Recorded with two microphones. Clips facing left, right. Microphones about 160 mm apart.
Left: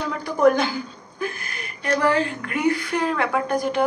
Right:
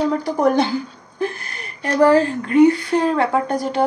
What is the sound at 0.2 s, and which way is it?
A woman's voice, 35° right (ahead or behind).